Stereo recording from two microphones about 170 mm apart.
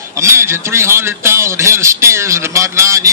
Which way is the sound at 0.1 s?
15° right (ahead or behind).